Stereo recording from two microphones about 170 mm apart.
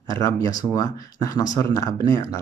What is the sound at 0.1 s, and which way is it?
Speech, 20° left (ahead or behind).